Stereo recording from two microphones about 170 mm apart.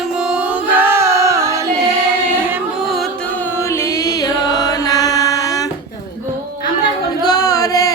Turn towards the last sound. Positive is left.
turn(degrees=20)  # may be behind; listen again after turning